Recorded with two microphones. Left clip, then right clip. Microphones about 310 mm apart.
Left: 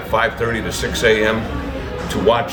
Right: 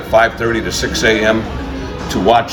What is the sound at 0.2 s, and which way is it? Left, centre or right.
Speech, centre.